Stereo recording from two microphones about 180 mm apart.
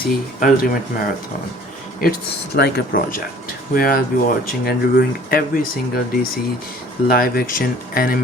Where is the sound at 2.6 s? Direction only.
60° left (ahead or behind).